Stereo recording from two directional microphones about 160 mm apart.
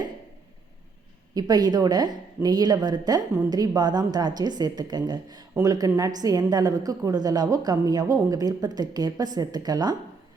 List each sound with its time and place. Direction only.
1.3 s speech: 25° right (ahead or behind)